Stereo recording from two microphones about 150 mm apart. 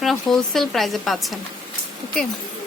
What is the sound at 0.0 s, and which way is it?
Speech, centre (ahead or behind).